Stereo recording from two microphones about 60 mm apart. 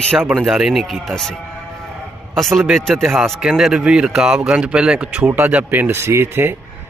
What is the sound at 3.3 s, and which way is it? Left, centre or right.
Speech, centre.